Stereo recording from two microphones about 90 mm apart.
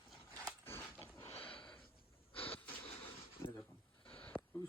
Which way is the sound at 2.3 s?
90° left.